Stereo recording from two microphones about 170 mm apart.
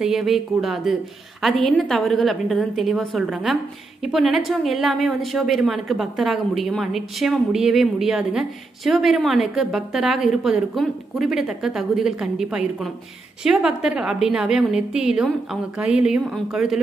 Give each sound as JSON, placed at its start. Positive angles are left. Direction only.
{"t": 0.0, "sound": "a woman's voice", "side_deg": -5}